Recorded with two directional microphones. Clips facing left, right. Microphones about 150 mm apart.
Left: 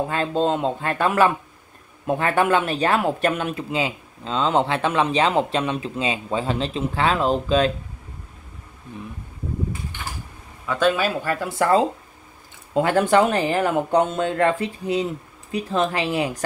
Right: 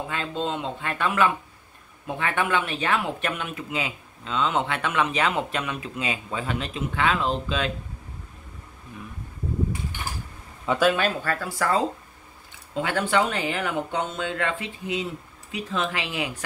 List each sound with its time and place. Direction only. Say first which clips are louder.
0.1 s speech: left 7 dB; 40° left (ahead or behind)
10.8 s speech: left 3 dB; centre (ahead or behind); by 11.8 s 25° left (ahead or behind)
12.7 s speech: left 6 dB; 45° left (ahead or behind)